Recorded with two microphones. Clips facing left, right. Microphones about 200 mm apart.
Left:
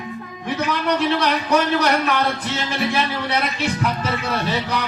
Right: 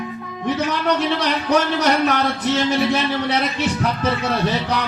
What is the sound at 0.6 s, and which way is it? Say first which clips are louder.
A man's voice: left 2 dB; 55° left (ahead or behind).